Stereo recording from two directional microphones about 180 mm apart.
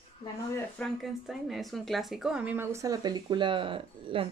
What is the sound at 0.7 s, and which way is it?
A woman's voice, centre (ahead or behind).